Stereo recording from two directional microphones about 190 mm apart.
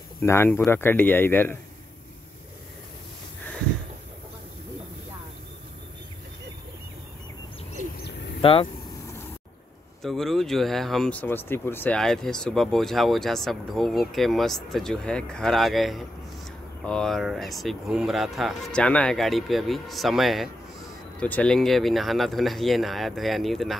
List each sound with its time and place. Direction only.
0.2 s speech: 15° left (ahead or behind)
8.0 s a sound: 65° left (ahead or behind)
8.4 s speech: 30° left (ahead or behind)
10.0 s speech: centre (ahead or behind)